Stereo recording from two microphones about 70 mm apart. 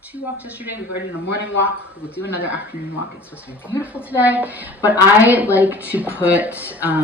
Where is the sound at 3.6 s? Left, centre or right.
Left.